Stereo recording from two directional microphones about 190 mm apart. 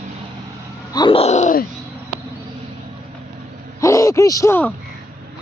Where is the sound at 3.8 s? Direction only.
15° left (ahead or behind).